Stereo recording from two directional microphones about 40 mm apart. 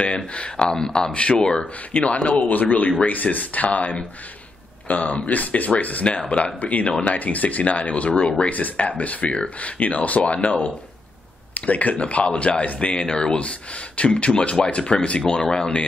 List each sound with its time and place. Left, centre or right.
0.0 s speech: left
1.6 s speech: left
8.5 s speech: left